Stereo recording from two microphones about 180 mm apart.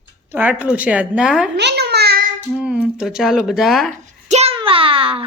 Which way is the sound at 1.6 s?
70° right (ahead or behind).